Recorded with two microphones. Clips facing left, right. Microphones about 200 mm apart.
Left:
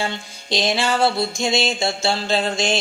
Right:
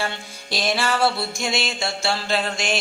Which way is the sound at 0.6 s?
20° left (ahead or behind).